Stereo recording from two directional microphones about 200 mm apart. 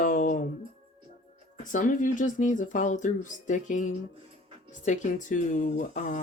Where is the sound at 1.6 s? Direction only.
40° left (ahead or behind).